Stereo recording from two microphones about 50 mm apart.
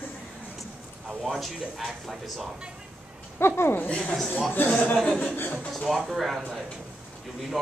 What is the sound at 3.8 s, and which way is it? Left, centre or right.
A woman's voice, left.